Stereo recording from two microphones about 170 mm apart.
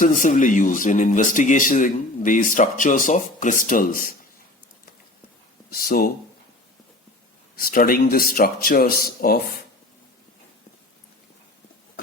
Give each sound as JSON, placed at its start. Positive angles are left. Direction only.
{"t": 0.0, "sound": "speech", "side_deg": 50}
{"t": 5.7, "sound": "speech", "side_deg": 60}
{"t": 7.5, "sound": "speech", "side_deg": 55}